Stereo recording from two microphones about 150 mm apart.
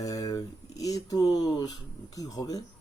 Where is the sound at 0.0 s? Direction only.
25° left (ahead or behind).